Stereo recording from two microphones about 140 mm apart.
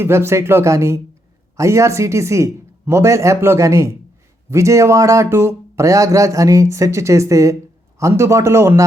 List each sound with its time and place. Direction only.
0.0 s speech: 15° right (ahead or behind)